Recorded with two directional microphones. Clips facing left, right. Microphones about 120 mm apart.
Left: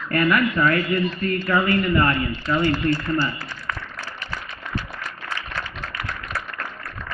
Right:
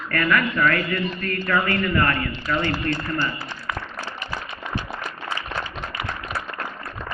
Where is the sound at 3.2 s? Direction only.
15° right (ahead or behind).